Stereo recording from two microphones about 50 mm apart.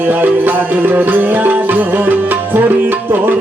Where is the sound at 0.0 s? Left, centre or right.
Right.